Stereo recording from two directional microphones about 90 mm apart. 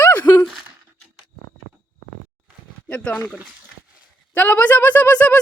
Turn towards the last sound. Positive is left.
turn(degrees=15)  # may be behind; listen again after turning